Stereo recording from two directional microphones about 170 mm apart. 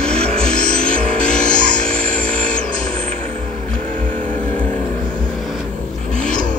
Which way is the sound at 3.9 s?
50° right (ahead or behind).